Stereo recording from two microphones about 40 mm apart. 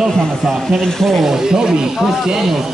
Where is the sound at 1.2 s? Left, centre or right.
Centre.